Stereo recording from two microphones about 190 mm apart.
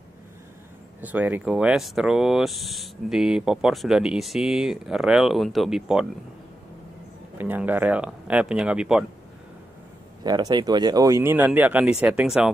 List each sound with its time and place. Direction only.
1.0 s speech: 10° right (ahead or behind)
7.3 s speech: 10° right (ahead or behind)
10.2 s speech: 20° right (ahead or behind); by 12.4 s 5° right (ahead or behind)